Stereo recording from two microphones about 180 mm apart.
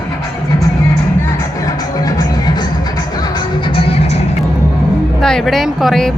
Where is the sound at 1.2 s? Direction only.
20° left (ahead or behind); by 4.3 s 35° left (ahead or behind).